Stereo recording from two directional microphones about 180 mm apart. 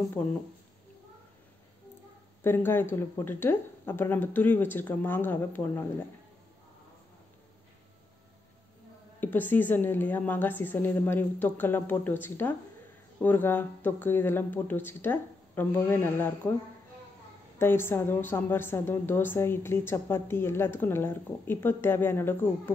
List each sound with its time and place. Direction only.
2.4 s a woman's voice: 10° left (ahead or behind)
9.2 s a woman's voice: 10° left (ahead or behind)
17.6 s a woman's voice: 10° left (ahead or behind)